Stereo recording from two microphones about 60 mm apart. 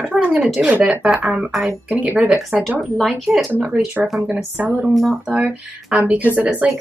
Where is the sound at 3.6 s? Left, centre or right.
Right.